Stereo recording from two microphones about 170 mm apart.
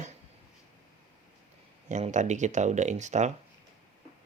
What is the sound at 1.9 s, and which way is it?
Speech, 45° right (ahead or behind).